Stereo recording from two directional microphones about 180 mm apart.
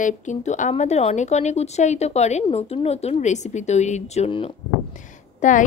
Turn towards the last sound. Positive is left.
turn(degrees=45)  # may be behind; listen again after turning